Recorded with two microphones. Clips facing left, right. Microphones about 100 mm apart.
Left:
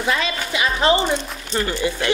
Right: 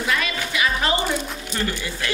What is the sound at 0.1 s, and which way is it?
Music, 25° left (ahead or behind).